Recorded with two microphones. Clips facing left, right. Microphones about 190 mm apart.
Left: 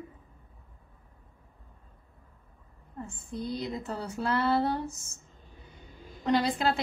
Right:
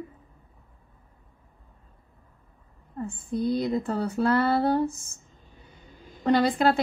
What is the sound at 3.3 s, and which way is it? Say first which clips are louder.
A woman's voice: right 9 dB; 55° right (ahead or behind).